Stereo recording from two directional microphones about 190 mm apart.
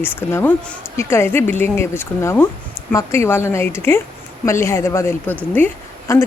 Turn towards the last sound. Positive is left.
turn(degrees=10)  # may be behind; listen again after turning